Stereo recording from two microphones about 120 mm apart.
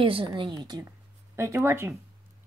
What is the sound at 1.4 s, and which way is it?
Speech, 25° right (ahead or behind).